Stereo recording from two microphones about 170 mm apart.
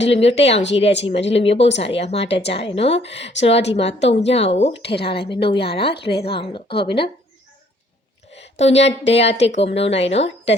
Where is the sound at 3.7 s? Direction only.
40° left (ahead or behind).